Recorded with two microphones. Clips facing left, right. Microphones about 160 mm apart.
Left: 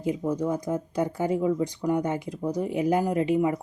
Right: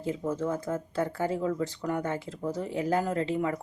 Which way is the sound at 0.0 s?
15° left (ahead or behind).